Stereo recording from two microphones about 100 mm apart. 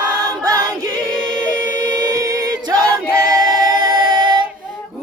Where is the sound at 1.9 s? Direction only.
40° right (ahead or behind).